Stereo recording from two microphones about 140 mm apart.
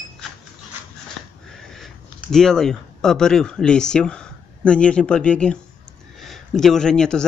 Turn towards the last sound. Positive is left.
turn(degrees=5)  # may be behind; listen again after turning